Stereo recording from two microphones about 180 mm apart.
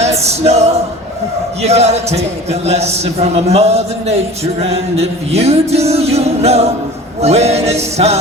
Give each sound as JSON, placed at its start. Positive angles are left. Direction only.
{"t": 0.2, "sound": "a man's voice", "side_deg": -35}